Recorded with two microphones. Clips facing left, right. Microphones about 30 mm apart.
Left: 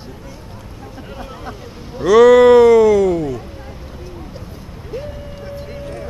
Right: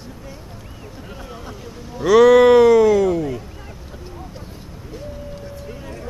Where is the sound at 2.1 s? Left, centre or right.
Centre.